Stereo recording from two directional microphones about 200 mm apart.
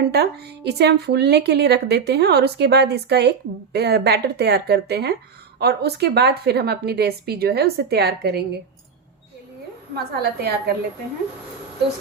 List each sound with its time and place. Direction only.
0.1 s a woman's voice: 55° right (ahead or behind)
9.9 s a woman's voice: 55° right (ahead or behind)